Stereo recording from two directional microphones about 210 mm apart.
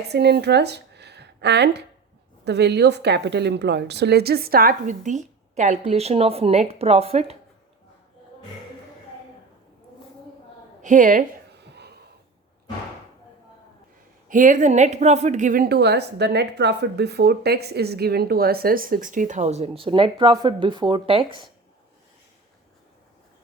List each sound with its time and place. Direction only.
0.1 s a woman's voice: 55° right (ahead or behind); by 7.3 s 30° right (ahead or behind)
10.8 s a sound: 40° right (ahead or behind)
14.3 s a woman's voice: 40° right (ahead or behind)